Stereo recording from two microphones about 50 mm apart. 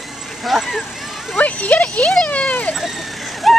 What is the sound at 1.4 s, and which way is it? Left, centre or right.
Speech, left.